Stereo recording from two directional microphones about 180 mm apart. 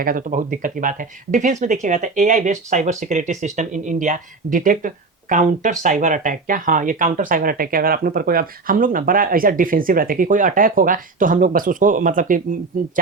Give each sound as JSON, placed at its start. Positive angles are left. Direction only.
{"t": 0.0, "sound": "speech", "side_deg": -50}